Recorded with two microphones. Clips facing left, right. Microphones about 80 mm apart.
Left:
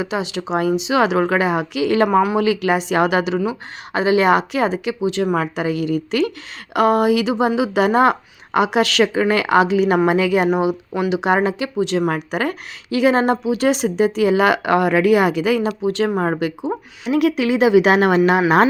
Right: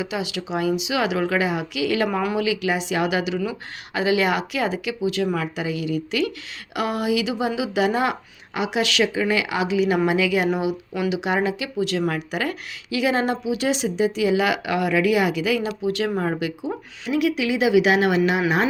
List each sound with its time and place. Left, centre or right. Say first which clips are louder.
0.0 s speech: left 4 dB; left
3.4 s speech: left 5 dB; left
11.8 s speech: left 4 dB; left
16.7 s speech: left 5 dB; left
17.1 s speech: left 5 dB; left